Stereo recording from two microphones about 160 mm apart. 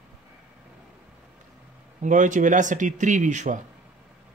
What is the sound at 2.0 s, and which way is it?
Speech, 55° right (ahead or behind).